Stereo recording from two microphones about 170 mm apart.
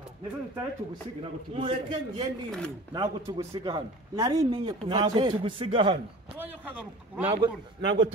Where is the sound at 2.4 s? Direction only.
5° left (ahead or behind).